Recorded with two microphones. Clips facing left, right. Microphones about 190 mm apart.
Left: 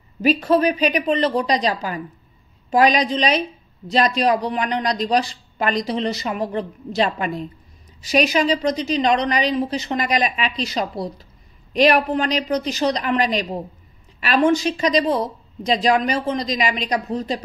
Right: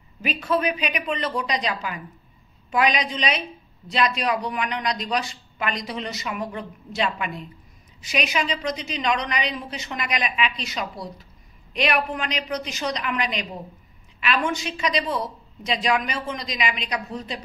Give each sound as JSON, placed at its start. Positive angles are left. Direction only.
{"t": 0.2, "sound": "a woman's voice", "side_deg": 35}